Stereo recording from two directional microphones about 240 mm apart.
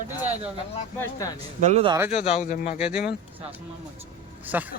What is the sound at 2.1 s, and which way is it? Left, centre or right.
Speech, left.